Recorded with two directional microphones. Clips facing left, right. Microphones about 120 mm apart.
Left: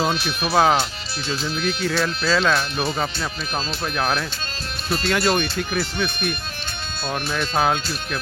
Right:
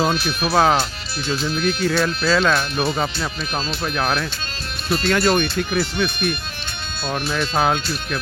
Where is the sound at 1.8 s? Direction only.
Centre (ahead or behind).